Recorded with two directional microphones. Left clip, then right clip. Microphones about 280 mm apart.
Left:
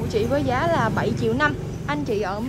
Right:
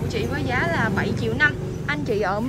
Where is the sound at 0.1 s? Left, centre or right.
Centre.